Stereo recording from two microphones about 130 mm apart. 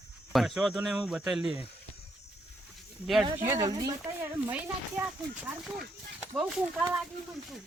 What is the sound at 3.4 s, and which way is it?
Speech, 20° right (ahead or behind).